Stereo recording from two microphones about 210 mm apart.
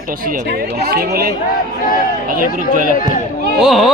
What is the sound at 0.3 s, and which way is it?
Speech, 45° right (ahead or behind).